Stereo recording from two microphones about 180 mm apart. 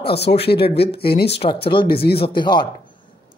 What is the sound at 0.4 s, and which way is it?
Speech, 65° left (ahead or behind).